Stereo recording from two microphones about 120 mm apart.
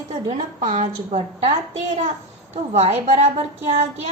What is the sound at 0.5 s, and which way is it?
Speech, 85° right.